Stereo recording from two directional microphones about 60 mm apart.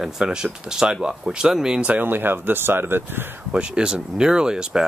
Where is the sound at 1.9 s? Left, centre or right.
Right.